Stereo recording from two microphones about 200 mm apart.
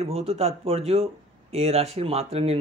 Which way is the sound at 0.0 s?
30° right (ahead or behind).